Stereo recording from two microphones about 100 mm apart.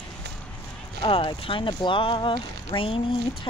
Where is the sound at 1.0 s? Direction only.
60° left (ahead or behind).